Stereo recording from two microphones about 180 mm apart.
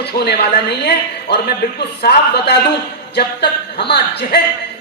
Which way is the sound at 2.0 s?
65° left (ahead or behind).